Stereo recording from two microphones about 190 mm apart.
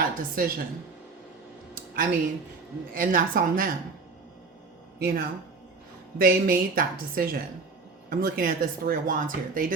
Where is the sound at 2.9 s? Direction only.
45° right (ahead or behind).